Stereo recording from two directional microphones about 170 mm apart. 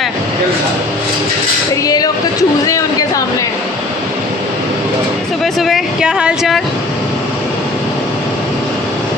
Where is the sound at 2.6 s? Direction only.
20° left (ahead or behind).